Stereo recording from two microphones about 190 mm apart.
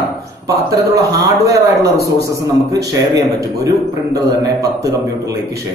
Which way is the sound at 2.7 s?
20° right (ahead or behind).